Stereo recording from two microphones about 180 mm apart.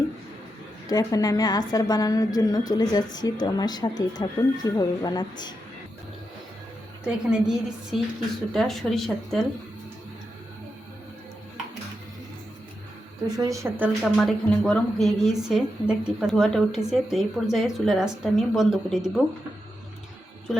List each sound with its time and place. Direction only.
0.9 s a woman's voice: 20° left (ahead or behind)
7.0 s a woman's voice: 5° right (ahead or behind)
13.2 s a woman's voice: 20° right (ahead or behind)
14.0 s a woman's voice: centre (ahead or behind)